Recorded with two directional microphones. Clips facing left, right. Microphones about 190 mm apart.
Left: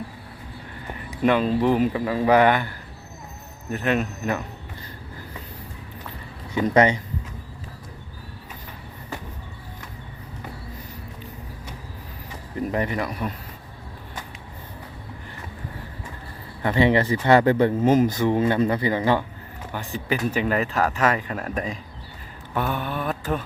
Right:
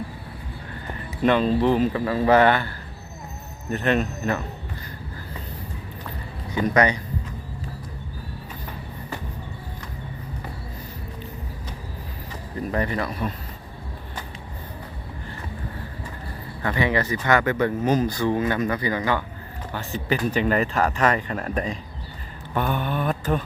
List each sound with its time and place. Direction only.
0.9 s speech: 10° left (ahead or behind)
6.5 s speech: 25° left (ahead or behind)
12.6 s speech: 15° left (ahead or behind)
16.6 s speech: 25° left (ahead or behind)
19.7 s speech: 10° left (ahead or behind)